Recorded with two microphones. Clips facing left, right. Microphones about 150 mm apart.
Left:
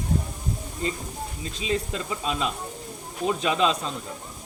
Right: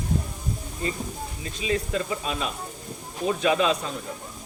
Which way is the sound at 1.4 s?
25° left (ahead or behind).